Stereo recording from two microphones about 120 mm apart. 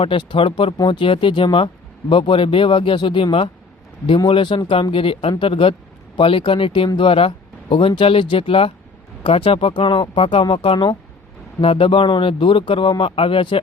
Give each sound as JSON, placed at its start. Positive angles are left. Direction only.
{"t": 0.0, "sound": "speech", "side_deg": 45}